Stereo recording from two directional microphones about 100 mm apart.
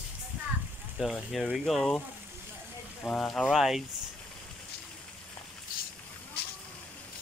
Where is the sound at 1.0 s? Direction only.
5° right (ahead or behind).